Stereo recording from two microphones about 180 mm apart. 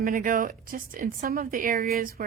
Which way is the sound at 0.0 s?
50° right (ahead or behind).